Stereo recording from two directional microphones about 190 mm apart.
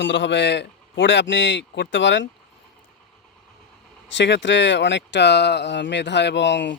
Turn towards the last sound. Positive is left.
turn(degrees=70)  # may be behind; listen again after turning